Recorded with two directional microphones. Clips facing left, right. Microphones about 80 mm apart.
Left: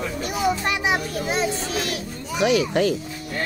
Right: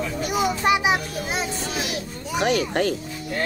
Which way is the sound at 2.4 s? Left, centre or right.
Right.